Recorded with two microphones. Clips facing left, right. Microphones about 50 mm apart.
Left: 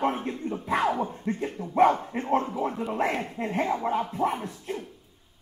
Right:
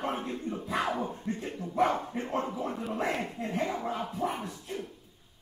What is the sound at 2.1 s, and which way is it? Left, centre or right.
Speech, left.